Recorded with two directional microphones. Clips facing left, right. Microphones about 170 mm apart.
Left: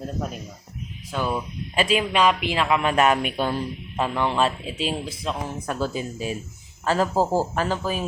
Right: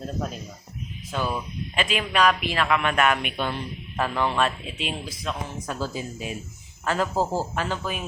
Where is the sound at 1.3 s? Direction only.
35° left (ahead or behind).